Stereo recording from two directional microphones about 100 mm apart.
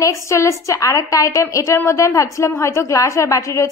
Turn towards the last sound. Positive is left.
turn(degrees=30)  # may be behind; listen again after turning